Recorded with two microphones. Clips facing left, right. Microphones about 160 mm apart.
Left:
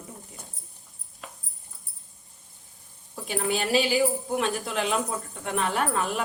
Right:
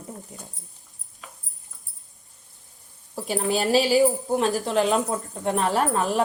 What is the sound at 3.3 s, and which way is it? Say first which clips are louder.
A woman's voice: right 4 dB; 35° right (ahead or behind).